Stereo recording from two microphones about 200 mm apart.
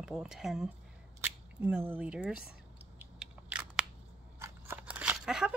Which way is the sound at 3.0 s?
5° right (ahead or behind).